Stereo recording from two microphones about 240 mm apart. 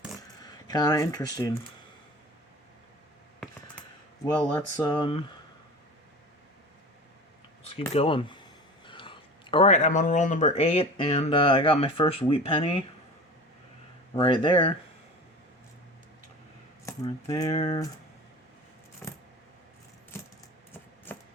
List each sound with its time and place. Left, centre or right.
0.2 s a sound: centre
4.8 s speech: centre
7.7 s speech: left
14.2 s speech: left
16.8 s speech: centre
20.7 s keys jangling: centre